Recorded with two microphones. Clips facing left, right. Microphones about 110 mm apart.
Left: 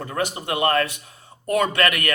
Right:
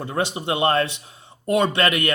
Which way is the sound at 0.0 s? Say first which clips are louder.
Right 2 dB; 25° right (ahead or behind).